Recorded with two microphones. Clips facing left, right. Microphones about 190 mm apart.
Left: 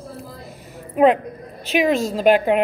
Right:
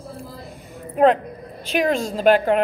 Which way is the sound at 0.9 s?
5° left (ahead or behind).